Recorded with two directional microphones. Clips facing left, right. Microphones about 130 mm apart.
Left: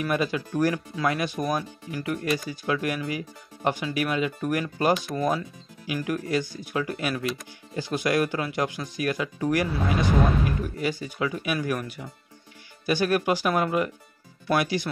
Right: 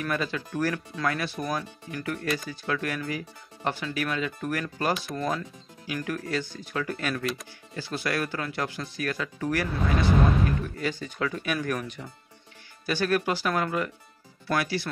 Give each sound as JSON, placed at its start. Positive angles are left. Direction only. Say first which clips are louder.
{"t": 0.0, "sound": "speech", "louder": "left 4 dB", "side_deg": 15}